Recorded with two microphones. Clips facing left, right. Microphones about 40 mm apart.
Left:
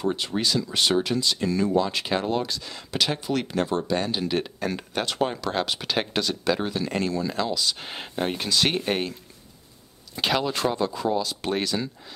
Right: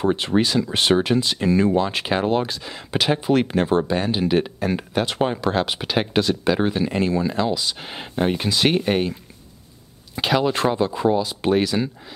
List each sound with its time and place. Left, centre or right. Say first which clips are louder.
0.0 s speech: right 6 dB; right
3.9 s speech: right 5 dB; centre
10.2 s speech: right 4 dB; right